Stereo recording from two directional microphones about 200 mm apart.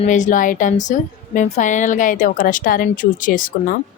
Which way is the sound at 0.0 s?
40° left (ahead or behind).